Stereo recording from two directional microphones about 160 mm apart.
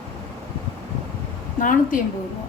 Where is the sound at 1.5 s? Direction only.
55° left (ahead or behind).